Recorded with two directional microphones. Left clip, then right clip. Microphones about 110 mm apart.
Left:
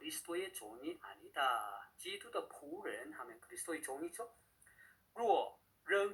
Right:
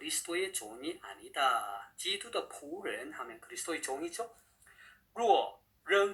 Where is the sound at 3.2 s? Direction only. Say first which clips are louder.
Right 7 dB; 15° right (ahead or behind).